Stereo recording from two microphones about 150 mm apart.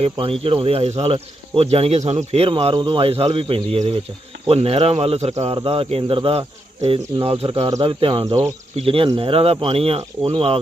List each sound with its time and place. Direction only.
0.0 s speech: 40° right (ahead or behind)